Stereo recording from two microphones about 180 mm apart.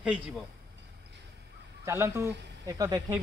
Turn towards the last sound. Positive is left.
turn(degrees=-20)  # may be behind; listen again after turning